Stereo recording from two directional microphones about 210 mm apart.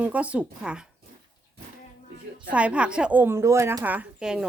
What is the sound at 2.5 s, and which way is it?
Speech, 5° right (ahead or behind).